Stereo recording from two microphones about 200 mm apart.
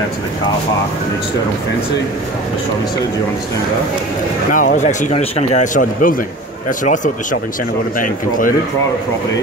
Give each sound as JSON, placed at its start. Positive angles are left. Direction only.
{"t": 4.5, "sound": "speech", "side_deg": 40}
{"t": 8.0, "sound": "a man's voice", "side_deg": 45}